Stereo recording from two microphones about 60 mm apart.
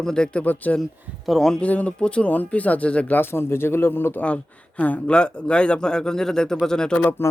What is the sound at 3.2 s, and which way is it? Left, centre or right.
Speech, left.